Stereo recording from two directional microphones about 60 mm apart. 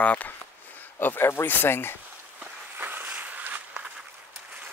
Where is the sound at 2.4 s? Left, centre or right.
Right.